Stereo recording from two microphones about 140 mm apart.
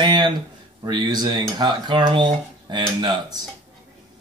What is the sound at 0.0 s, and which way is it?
Speech, 35° right (ahead or behind).